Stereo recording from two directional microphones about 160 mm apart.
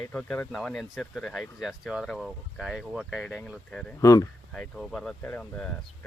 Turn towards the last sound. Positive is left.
turn(degrees=10)  # may be behind; listen again after turning